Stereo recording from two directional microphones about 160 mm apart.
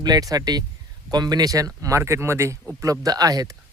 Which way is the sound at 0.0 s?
25° right (ahead or behind).